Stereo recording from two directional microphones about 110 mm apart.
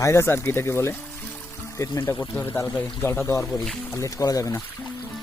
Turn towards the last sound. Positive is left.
turn(degrees=30)  # may be behind; listen again after turning